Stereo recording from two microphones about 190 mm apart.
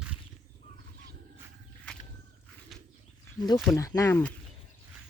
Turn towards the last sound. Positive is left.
turn(degrees=10)  # may be behind; listen again after turning